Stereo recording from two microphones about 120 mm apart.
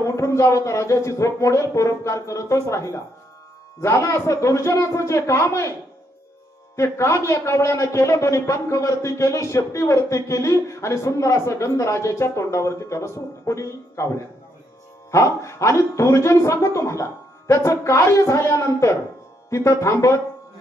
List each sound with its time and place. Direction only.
0.0 s a man's voice: 25° left (ahead or behind)
6.8 s a man's voice: 25° left (ahead or behind)